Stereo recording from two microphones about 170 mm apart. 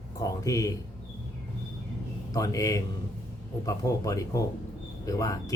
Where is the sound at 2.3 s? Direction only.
20° left (ahead or behind).